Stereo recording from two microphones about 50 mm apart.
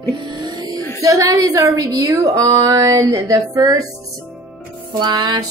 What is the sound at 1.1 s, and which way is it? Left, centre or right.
A woman's voice, right.